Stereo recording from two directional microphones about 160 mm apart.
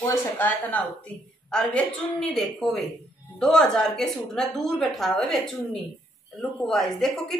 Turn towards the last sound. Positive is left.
turn(degrees=5)  # may be behind; listen again after turning